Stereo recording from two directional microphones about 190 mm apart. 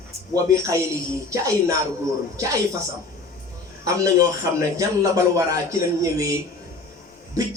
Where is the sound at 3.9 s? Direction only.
15° right (ahead or behind).